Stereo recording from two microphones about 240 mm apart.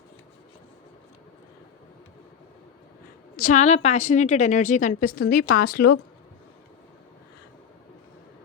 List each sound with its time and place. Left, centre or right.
3.3 s a woman's voice: left